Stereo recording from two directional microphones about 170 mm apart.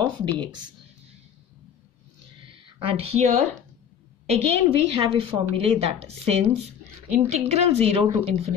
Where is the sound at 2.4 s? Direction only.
35° right (ahead or behind).